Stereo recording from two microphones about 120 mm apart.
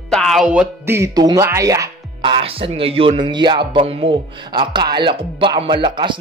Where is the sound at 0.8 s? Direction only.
20° right (ahead or behind).